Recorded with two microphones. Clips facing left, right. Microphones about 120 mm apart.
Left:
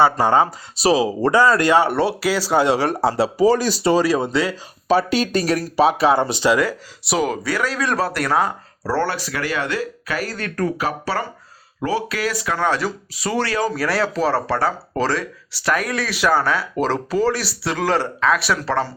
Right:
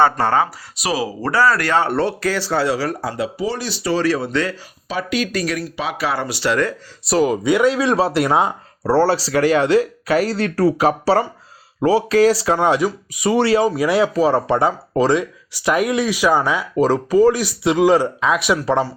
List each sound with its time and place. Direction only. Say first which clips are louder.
0.0 s speech: even; 15° left (ahead or behind)
0.8 s speech: left 5 dB; 25° left (ahead or behind); by 3.8 s 45° left (ahead or behind)
3.9 s speech: right 2 dB; 15° left (ahead or behind)
4.9 s speech: left 4 dB; 35° left (ahead or behind); by 6.7 s 10° left (ahead or behind)
7.1 s speech: right 4 dB; centre (ahead or behind)
7.4 s speech: right 7 dB; 20° right (ahead or behind)
12.5 s speech: right 4 dB; 20° right (ahead or behind)